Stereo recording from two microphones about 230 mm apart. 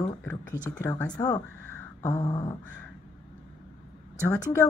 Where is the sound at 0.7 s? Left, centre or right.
Centre.